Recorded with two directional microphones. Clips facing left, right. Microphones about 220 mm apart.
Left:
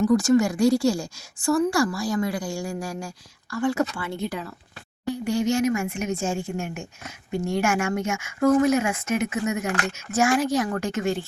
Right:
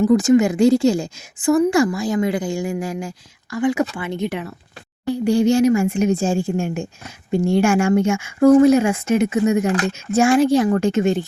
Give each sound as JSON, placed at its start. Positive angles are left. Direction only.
{"t": 0.0, "sound": "speech", "side_deg": -20}
{"t": 5.1, "sound": "speech", "side_deg": -30}